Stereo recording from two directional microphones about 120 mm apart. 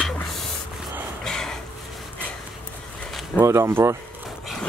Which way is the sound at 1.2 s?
5° left (ahead or behind).